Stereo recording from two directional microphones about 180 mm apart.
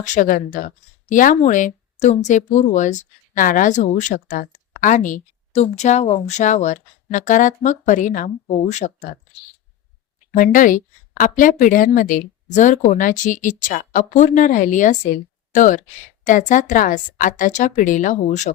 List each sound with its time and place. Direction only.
0.0 s speech: 45° left (ahead or behind)
10.3 s speech: 50° left (ahead or behind)